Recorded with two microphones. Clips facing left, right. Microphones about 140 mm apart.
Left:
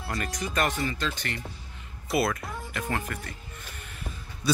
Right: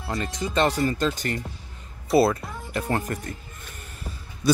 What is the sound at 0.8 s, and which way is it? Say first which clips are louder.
Speech: right 7 dB; 45° right (ahead or behind).